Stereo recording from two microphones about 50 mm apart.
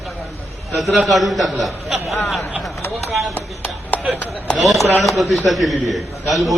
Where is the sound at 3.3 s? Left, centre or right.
Left.